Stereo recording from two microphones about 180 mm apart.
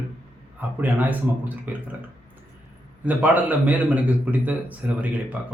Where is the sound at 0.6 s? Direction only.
10° right (ahead or behind).